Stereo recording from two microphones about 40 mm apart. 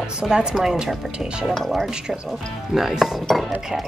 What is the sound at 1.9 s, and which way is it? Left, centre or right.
Speech, centre.